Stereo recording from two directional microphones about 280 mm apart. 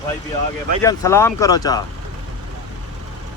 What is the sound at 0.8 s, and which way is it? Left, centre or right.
Speech, centre.